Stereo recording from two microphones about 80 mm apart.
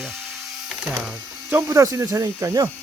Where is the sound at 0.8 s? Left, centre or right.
Centre.